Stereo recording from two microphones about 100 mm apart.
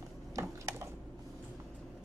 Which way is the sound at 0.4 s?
30° right (ahead or behind).